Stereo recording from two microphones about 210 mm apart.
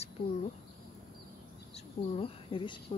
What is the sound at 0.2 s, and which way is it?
Speech, 45° left (ahead or behind).